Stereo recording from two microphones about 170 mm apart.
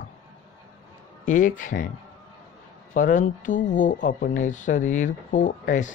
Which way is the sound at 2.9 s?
50° left (ahead or behind).